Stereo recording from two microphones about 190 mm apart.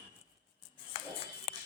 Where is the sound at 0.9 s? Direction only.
30° left (ahead or behind).